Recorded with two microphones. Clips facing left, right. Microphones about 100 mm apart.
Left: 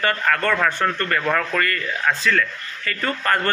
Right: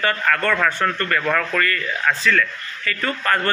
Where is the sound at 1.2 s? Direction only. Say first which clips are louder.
Even; 15° left (ahead or behind).